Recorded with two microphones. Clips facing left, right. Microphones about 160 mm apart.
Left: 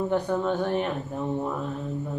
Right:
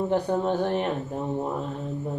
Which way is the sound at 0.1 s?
35° right (ahead or behind).